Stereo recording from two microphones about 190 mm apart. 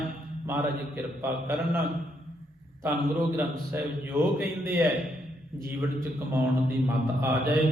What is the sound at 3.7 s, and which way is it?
Speech, 10° right (ahead or behind).